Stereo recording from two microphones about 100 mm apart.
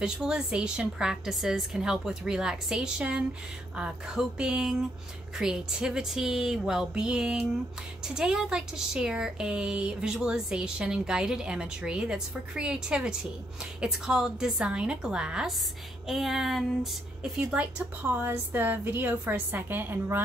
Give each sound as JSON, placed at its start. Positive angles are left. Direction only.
{"t": 0.0, "sound": "a woman's voice", "side_deg": -10}
{"t": 18.0, "sound": "a woman's voice", "side_deg": -20}